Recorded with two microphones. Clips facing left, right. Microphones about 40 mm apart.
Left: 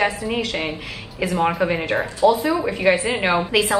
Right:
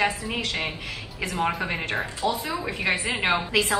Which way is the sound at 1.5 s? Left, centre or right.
Centre.